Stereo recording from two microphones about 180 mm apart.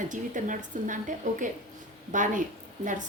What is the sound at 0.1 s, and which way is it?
Speech, 45° right (ahead or behind).